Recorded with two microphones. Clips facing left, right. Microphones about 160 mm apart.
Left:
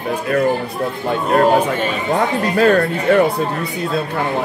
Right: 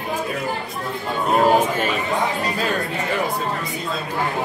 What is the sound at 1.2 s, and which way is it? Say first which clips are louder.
Speech: left 3 dB; 5° right (ahead or behind).